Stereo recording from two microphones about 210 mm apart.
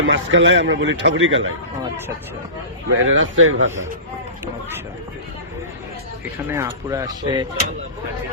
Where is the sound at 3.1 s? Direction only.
70° right (ahead or behind).